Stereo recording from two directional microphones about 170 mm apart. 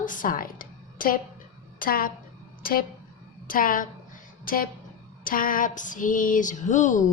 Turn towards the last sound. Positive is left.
turn(degrees=45)  # may be behind; listen again after turning